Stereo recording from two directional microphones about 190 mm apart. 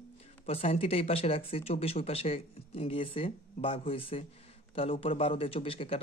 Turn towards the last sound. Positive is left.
turn(degrees=30)  # may be behind; listen again after turning